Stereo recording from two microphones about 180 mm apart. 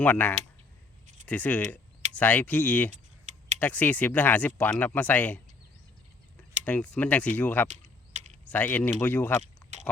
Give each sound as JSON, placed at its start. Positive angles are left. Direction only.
{"t": 0.0, "sound": "speech", "side_deg": 10}
{"t": 3.3, "sound": "typing", "side_deg": -40}
{"t": 3.6, "sound": "speech", "side_deg": 10}
{"t": 6.7, "sound": "speech", "side_deg": 5}
{"t": 7.7, "sound": "mechanisms", "side_deg": -40}
{"t": 8.4, "sound": "speech", "side_deg": 10}
{"t": 9.6, "sound": "oink", "side_deg": 10}